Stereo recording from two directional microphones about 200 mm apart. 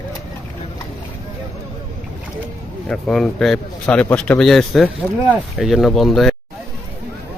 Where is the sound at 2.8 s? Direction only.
Centre (ahead or behind).